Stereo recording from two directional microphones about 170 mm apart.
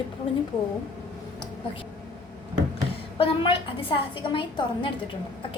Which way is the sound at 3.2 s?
30° left (ahead or behind).